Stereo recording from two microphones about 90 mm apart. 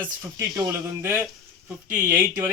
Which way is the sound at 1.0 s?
25° right (ahead or behind).